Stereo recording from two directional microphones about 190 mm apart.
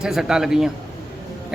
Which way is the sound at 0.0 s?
Centre (ahead or behind).